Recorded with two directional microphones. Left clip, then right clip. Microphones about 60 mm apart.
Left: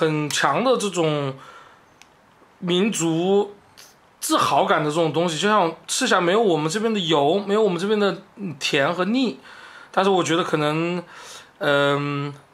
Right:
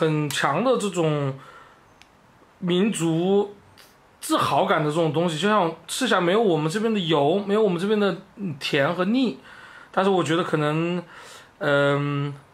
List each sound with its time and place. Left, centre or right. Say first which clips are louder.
0.0 s speech: left 2 dB; left
2.6 s speech: left 2 dB; left